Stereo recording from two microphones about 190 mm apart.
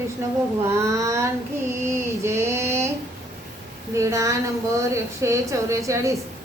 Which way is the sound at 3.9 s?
15° right (ahead or behind).